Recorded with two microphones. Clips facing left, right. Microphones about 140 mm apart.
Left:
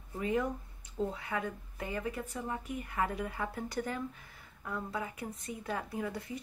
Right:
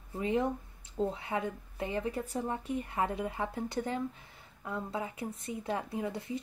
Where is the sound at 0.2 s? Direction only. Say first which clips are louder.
Right 2 dB; 25° right (ahead or behind).